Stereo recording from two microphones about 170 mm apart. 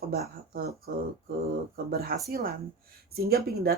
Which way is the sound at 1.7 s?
60° right (ahead or behind).